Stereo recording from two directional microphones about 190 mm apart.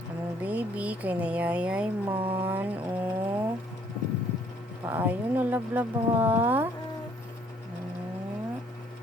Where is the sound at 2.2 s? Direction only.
30° right (ahead or behind).